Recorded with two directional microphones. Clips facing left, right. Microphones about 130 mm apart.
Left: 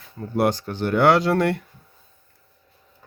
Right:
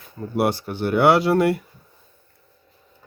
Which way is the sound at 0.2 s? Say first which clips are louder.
Even; 10° right (ahead or behind).